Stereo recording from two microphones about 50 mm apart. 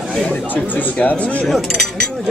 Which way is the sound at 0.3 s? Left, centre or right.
Left.